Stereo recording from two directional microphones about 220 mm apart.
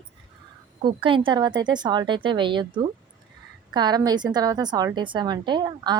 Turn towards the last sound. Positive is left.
turn(degrees=-20)  # may be behind; listen again after turning